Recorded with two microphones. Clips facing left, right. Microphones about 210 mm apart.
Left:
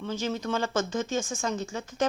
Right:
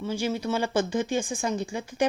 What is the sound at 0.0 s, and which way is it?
Speech, 10° right (ahead or behind).